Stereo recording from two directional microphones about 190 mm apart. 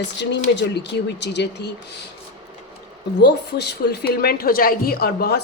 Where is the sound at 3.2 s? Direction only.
60° left (ahead or behind).